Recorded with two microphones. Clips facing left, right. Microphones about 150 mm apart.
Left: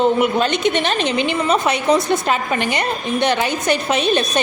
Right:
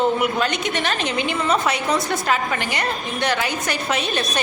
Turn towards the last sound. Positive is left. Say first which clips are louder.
# left 6 dB
turn(degrees=20)  # may be behind; listen again after turning